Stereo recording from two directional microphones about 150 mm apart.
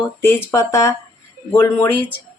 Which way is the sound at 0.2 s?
15° left (ahead or behind).